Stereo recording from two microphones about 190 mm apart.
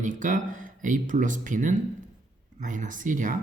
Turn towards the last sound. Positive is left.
turn(degrees=-45)  # may be behind; listen again after turning